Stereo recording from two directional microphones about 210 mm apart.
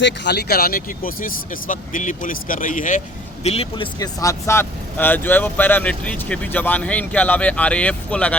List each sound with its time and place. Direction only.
0.0 s speech: 50° left (ahead or behind); by 8.4 s 5° left (ahead or behind)